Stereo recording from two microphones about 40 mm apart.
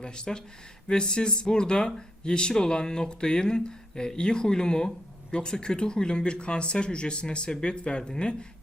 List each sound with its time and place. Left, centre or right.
0.0 s speech: left